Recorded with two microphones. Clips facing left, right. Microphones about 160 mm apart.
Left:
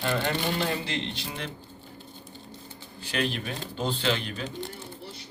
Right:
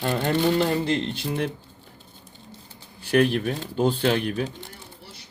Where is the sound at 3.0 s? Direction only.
55° right (ahead or behind).